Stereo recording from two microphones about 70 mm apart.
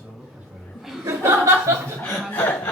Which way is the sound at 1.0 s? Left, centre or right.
Right.